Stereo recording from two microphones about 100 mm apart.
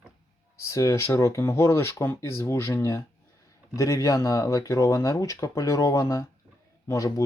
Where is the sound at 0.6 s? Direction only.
30° left (ahead or behind).